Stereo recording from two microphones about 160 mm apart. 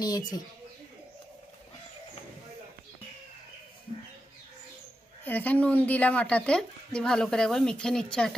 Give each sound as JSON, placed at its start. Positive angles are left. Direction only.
{"t": 0.0, "sound": "speech", "side_deg": 25}
{"t": 5.2, "sound": "a woman's voice", "side_deg": 10}